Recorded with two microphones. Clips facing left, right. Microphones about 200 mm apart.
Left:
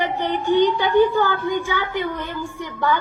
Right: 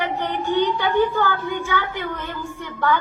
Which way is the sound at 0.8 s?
10° left (ahead or behind).